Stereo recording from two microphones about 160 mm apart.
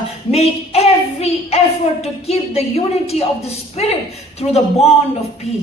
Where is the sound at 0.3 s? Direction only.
40° left (ahead or behind).